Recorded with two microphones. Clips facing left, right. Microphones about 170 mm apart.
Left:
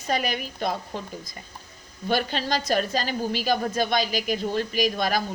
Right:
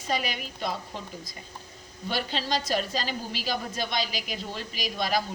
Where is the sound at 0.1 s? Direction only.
50° left (ahead or behind).